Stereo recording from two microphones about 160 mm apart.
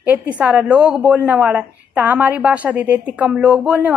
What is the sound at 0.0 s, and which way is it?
A woman's voice, 10° right (ahead or behind).